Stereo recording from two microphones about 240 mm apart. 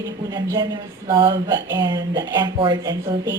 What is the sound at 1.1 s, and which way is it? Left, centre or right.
A woman's voice, centre.